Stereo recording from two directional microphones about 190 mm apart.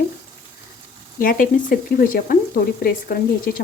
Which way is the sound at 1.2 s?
50° left (ahead or behind).